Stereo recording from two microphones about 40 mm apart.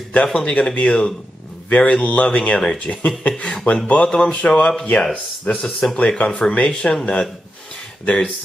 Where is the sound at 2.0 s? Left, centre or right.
Left.